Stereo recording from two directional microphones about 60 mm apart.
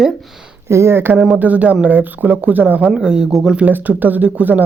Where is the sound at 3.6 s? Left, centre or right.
Right.